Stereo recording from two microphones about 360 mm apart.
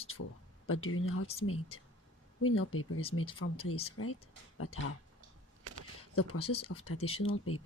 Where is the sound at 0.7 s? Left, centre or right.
Left.